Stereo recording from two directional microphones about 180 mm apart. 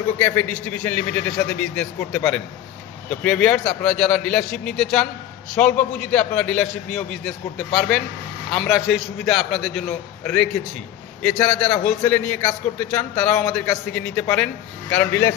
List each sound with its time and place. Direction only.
0.2 s a man's voice: 10° left (ahead or behind)